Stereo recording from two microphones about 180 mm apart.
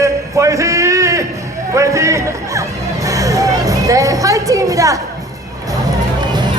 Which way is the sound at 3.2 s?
20° right (ahead or behind).